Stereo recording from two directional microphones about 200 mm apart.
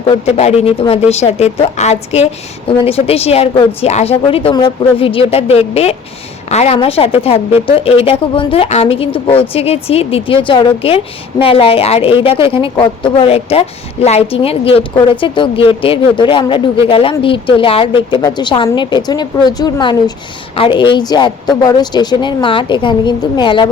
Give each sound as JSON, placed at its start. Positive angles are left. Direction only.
{"t": 0.0, "sound": "a woman's voice", "side_deg": 30}